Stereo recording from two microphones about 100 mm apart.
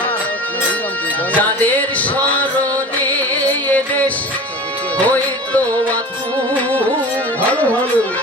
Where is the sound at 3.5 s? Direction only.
15° left (ahead or behind).